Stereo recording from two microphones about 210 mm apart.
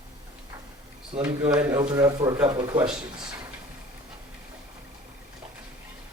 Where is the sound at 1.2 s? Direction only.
10° right (ahead or behind).